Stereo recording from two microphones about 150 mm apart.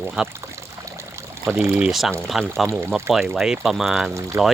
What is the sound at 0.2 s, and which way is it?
Speech, 5° right (ahead or behind).